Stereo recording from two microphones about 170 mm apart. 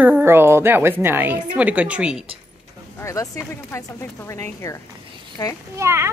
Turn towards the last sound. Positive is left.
turn(degrees=-15)  # may be behind; listen again after turning